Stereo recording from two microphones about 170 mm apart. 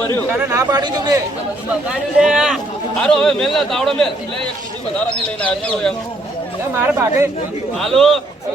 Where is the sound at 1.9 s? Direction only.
5° right (ahead or behind).